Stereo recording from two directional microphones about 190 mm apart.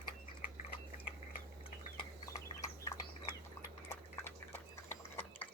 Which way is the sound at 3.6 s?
10° left (ahead or behind).